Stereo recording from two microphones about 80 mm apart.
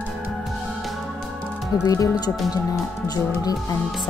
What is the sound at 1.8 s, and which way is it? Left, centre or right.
Speech, left.